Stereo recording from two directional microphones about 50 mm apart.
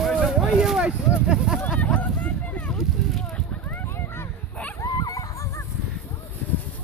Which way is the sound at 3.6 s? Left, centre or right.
Left.